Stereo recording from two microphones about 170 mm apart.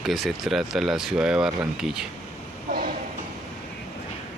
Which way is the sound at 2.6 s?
60° right (ahead or behind).